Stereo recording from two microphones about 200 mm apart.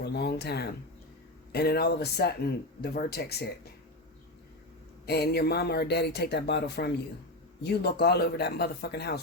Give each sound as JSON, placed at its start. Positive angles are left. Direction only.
{"t": 0.0, "sound": "speech", "side_deg": 55}
{"t": 5.0, "sound": "speech", "side_deg": 55}